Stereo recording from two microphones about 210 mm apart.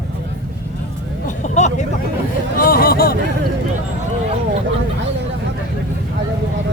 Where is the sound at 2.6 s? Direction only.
45° left (ahead or behind).